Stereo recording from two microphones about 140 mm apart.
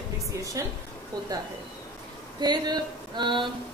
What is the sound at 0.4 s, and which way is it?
Speech, 25° right (ahead or behind).